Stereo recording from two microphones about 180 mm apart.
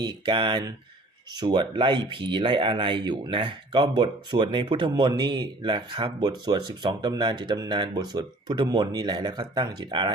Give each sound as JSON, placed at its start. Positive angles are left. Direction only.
{"t": 0.0, "sound": "speech", "side_deg": -25}